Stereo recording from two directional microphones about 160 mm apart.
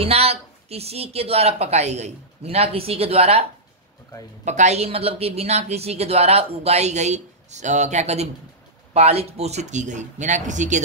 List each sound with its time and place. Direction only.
0.0 s a woman's voice: 40° right (ahead or behind)
4.5 s a woman's voice: 45° right (ahead or behind)